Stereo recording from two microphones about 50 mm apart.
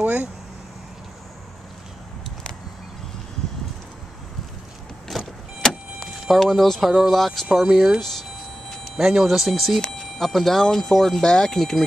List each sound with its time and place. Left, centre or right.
0.0 s vehicle: right
5.1 s vehicle: centre
6.0 s speech: centre
8.0 s a sound: centre
9.0 s speech: centre
9.8 s speech: centre